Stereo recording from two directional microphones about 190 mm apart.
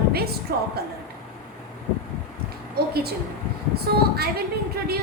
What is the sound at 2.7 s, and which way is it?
A woman's voice, 55° right (ahead or behind).